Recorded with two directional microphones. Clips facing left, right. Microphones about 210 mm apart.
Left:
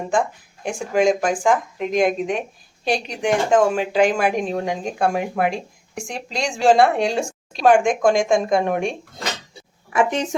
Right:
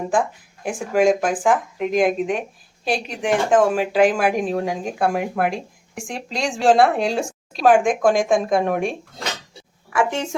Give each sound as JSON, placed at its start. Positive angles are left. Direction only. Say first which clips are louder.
{"t": 0.1, "sound": "speech", "louder": "left 3 dB", "side_deg": -5}
{"t": 9.9, "sound": "a woman's voice", "louder": "left 2 dB", "side_deg": 20}